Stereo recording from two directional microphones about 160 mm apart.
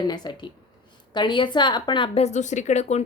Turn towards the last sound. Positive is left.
turn(degrees=45)  # may be behind; listen again after turning